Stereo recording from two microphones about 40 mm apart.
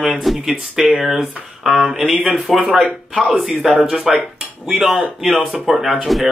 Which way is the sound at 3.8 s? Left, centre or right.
Centre.